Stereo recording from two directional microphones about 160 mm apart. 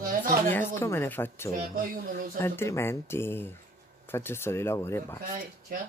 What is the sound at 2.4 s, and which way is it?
Speech, 15° left (ahead or behind).